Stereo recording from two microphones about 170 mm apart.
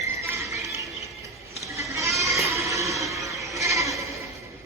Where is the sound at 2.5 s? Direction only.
20° right (ahead or behind).